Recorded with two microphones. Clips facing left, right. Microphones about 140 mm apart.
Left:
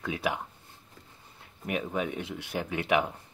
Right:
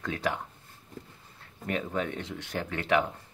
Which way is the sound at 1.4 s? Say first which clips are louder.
Even; 10° left (ahead or behind).